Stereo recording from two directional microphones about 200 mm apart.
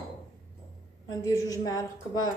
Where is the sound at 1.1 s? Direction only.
15° left (ahead or behind).